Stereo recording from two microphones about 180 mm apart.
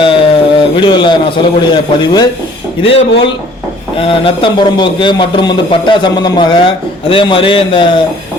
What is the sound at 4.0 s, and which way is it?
A man's voice, 30° left (ahead or behind).